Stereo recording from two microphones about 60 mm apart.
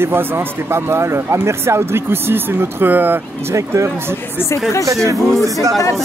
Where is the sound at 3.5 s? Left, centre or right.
Right.